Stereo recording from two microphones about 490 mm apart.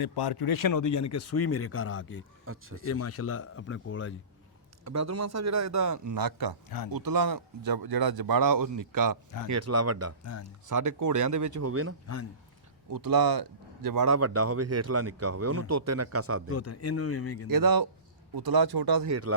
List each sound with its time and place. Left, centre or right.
0.0 s speech: left
2.5 s speech: right
2.8 s speech: left
4.9 s speech: right
9.5 s speech: right
12.9 s speech: right
16.5 s speech: left
17.5 s speech: right